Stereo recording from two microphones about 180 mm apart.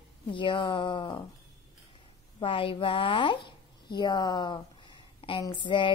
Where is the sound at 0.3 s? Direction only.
25° left (ahead or behind).